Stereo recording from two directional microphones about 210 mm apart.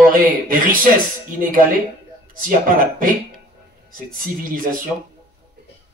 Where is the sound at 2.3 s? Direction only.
40° right (ahead or behind).